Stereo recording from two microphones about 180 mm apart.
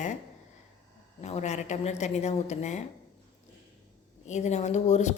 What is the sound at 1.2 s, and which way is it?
A woman's voice, 40° left (ahead or behind).